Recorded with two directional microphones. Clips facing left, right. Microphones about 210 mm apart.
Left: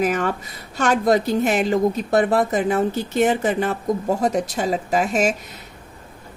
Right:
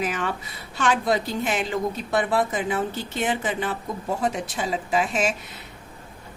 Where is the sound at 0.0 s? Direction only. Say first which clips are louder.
Left 6 dB; 45° left (ahead or behind).